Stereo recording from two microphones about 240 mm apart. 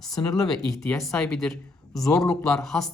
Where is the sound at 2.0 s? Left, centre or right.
Centre.